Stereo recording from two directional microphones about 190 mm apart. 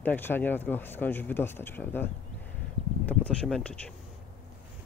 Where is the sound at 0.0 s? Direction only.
10° left (ahead or behind).